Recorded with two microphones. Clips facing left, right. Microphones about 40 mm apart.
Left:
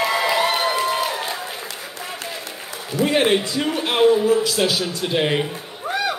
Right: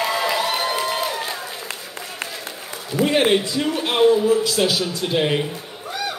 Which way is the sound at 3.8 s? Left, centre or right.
Centre.